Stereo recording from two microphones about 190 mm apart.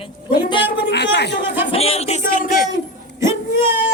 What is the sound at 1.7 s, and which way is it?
Speech, 30° left (ahead or behind).